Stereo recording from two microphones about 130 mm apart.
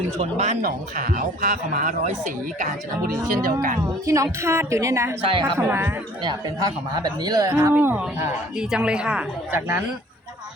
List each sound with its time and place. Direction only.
0.2 s speech: 60° right (ahead or behind)
3.2 s speech: 90° right
4.0 s a woman's voice: 25° right (ahead or behind)
5.2 s speech: 40° right (ahead or behind)
5.5 s a woman's voice: 15° right (ahead or behind)
6.9 s a woman's voice: 30° right (ahead or behind)
7.7 s a woman's voice: 15° right (ahead or behind)